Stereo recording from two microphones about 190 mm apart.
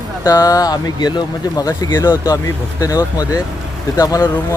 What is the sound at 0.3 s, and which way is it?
Speech, 20° left (ahead or behind).